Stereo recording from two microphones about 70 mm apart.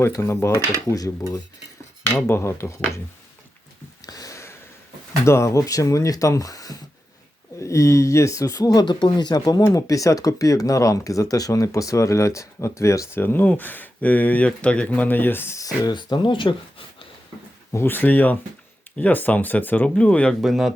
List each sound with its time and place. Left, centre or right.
0.1 s speech: left
0.9 s speech: left
2.2 s speech: left
4.0 s a sound: left
5.2 s speech: left
7.6 s speech: left
9.7 s speech: left
13.1 s speech: left
15.5 s speech: left
15.9 s speech: left
17.7 s speech: left
17.9 s speech: left
20.4 s speech: centre